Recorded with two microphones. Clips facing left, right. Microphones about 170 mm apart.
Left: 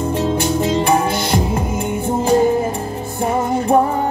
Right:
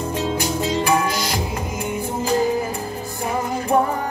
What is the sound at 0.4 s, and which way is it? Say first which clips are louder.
Music: left 5 dB; 25° left (ahead or behind).